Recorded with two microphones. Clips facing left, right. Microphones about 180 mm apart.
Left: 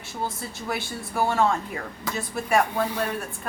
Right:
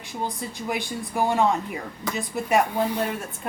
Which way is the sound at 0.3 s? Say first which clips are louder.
Right 2 dB; 15° right (ahead or behind).